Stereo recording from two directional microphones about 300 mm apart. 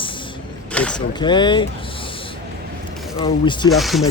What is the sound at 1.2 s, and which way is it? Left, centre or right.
Speech, centre.